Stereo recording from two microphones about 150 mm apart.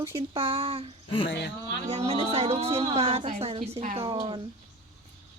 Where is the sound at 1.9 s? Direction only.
45° right (ahead or behind).